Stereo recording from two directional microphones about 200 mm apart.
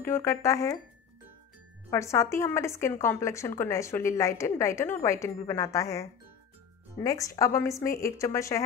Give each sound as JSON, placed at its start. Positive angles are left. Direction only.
{"t": 0.0, "sound": "a woman's voice", "side_deg": 15}
{"t": 1.9, "sound": "a woman's voice", "side_deg": 15}